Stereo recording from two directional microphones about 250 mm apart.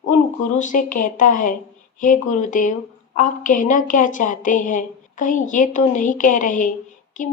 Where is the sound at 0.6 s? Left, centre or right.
Left.